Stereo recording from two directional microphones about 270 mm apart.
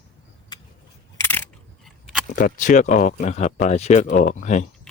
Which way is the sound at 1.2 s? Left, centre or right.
Centre.